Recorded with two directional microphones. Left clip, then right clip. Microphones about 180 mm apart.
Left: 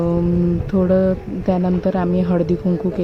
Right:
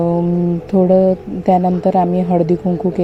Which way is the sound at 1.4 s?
10° right (ahead or behind).